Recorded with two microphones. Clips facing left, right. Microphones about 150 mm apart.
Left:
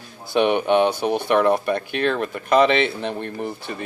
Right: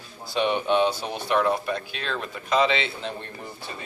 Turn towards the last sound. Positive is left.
turn(degrees=60)  # may be behind; listen again after turning